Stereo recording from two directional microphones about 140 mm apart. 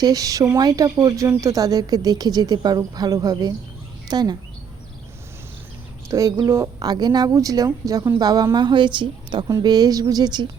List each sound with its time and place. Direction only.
0.0 s a woman's voice: 25° right (ahead or behind)
6.1 s a woman's voice: 20° right (ahead or behind)